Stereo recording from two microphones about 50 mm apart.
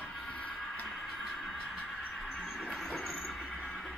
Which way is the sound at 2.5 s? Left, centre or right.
Centre.